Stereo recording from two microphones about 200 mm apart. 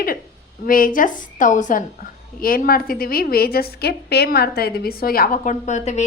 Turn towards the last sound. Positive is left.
turn(degrees=35)  # may be behind; listen again after turning